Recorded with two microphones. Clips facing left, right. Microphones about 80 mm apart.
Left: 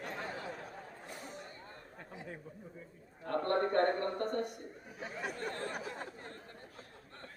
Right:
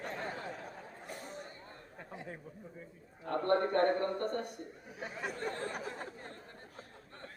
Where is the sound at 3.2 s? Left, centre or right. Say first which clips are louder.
Right 1 dB; left.